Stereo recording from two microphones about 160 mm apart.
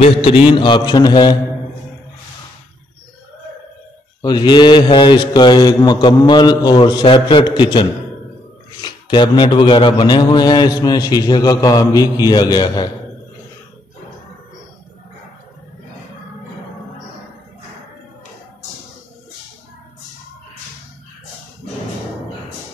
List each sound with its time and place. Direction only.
0.0 s a man's voice: 35° left (ahead or behind)
4.2 s a man's voice: 30° left (ahead or behind)
8.8 s a man's voice: 30° left (ahead or behind)